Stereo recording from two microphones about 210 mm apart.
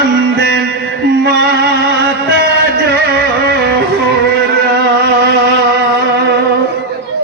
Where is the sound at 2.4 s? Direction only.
50° right (ahead or behind).